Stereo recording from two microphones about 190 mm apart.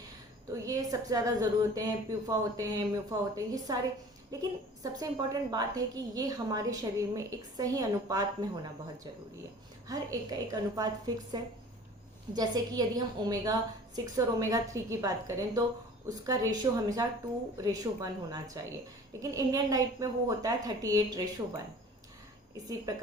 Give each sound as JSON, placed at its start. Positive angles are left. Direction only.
{"t": 0.6, "sound": "a woman's voice", "side_deg": -20}
{"t": 4.8, "sound": "a woman's voice", "side_deg": -20}
{"t": 9.9, "sound": "a woman's voice", "side_deg": -20}